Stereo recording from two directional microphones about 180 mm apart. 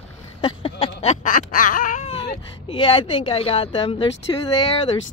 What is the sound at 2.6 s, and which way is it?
Speech, 30° left (ahead or behind).